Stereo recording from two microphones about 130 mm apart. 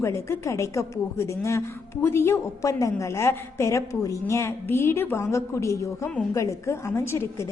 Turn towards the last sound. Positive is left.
turn(degrees=20)  # may be behind; listen again after turning